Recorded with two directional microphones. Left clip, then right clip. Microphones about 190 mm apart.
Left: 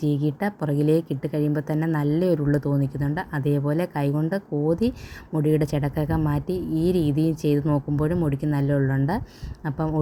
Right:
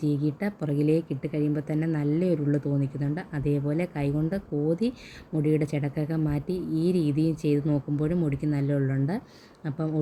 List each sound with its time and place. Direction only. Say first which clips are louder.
0.0 s speech: left 3 dB; 20° left (ahead or behind)